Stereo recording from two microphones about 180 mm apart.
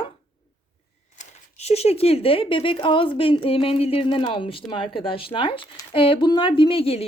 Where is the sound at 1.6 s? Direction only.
35° left (ahead or behind).